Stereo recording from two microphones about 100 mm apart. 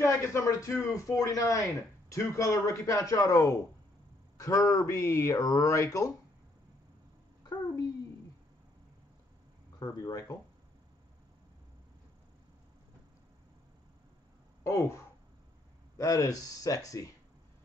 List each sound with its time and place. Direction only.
0.0 s speech: 25° left (ahead or behind)
7.4 s a sound: 40° left (ahead or behind)
9.8 s speech: 35° left (ahead or behind)
14.6 s speech: 30° left (ahead or behind)
16.0 s speech: 35° left (ahead or behind)